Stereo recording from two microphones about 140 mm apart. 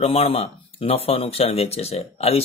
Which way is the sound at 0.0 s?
45° left (ahead or behind).